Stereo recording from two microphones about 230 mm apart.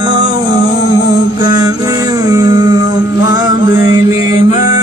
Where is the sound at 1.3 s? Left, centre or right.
Centre.